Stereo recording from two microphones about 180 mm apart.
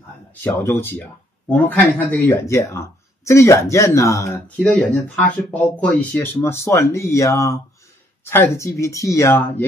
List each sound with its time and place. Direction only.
0.4 s speech: 10° left (ahead or behind)